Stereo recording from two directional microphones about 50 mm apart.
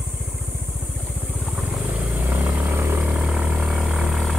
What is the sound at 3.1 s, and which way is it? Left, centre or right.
Vehicle, centre.